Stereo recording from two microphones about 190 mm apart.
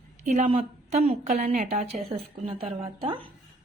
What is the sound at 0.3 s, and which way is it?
A woman's voice, 35° right (ahead or behind).